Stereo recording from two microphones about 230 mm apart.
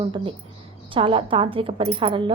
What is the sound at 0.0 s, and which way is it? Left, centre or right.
A woman's voice, right.